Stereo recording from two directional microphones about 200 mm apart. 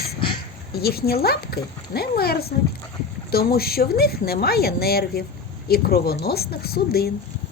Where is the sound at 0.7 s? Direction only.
50° left (ahead or behind).